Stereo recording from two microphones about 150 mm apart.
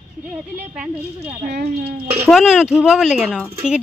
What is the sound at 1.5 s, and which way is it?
Speech, 90° right.